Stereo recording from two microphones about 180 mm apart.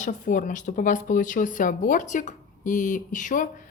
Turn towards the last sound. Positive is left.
turn(degrees=45)  # may be behind; listen again after turning